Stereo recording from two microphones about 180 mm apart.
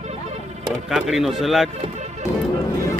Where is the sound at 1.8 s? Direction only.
40° right (ahead or behind).